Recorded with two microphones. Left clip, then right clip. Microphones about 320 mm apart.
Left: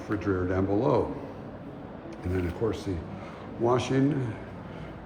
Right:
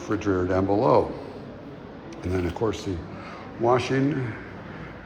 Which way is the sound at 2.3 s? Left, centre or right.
Centre.